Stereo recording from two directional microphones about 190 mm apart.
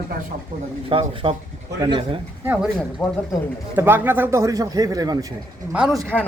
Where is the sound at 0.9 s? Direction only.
30° right (ahead or behind).